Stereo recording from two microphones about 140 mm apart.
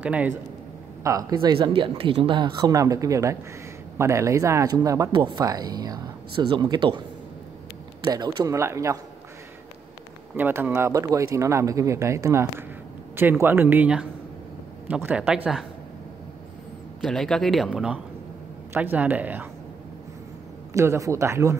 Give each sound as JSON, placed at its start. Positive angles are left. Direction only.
{"t": 0.0, "sound": "speech", "side_deg": -10}
{"t": 1.0, "sound": "speech", "side_deg": -30}
{"t": 8.0, "sound": "speech", "side_deg": -30}
{"t": 10.3, "sound": "speech", "side_deg": -15}
{"t": 17.0, "sound": "speech", "side_deg": 5}
{"t": 20.7, "sound": "speech", "side_deg": -20}